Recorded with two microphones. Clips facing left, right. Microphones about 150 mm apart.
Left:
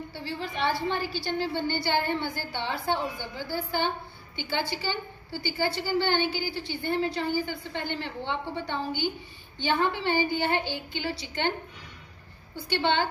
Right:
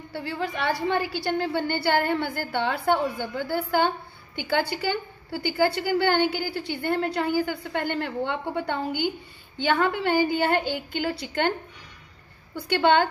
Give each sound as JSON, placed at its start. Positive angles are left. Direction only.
{"t": 0.1, "sound": "a woman's voice", "side_deg": -55}
{"t": 9.7, "sound": "a woman's voice", "side_deg": -55}
{"t": 12.5, "sound": "a woman's voice", "side_deg": -50}